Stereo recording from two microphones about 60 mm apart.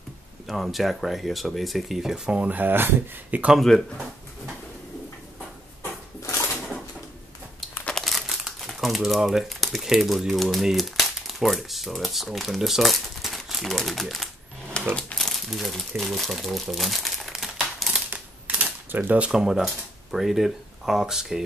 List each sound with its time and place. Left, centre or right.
0.5 s speech: centre
2.2 s speech: centre
2.5 s speech: right
3.5 s speech: centre
8.0 s speech: centre
14.8 s crumpling: centre
15.1 s crumpling: centre
16.0 s speech: centre
17.7 s typewriter: centre
18.1 s typewriter: right
19.1 s speech: centre